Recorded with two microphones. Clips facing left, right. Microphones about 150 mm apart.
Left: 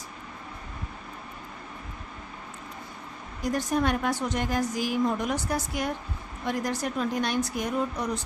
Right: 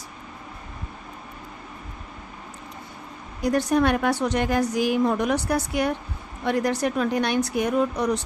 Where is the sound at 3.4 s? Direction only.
70° right (ahead or behind).